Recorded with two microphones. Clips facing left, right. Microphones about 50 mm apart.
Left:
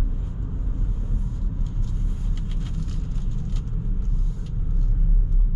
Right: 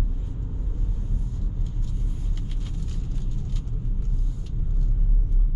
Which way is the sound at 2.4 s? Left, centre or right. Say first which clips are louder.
Left 3 dB; centre.